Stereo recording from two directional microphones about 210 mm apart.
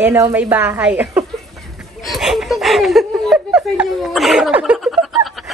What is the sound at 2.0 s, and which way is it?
Snicker, centre (ahead or behind).